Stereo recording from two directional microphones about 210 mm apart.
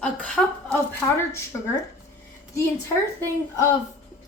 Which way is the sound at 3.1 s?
10° left (ahead or behind).